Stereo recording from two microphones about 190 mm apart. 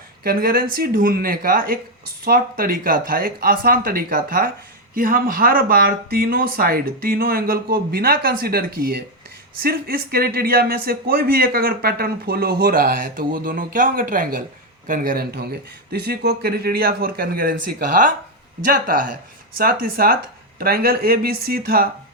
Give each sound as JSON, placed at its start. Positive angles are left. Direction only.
{"t": 0.3, "sound": "speech", "side_deg": -50}